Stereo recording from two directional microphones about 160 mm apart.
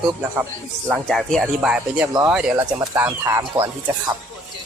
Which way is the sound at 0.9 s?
5° left (ahead or behind).